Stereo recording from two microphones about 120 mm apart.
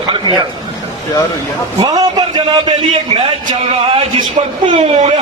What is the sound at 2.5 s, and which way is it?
A man's voice, 50° right (ahead or behind).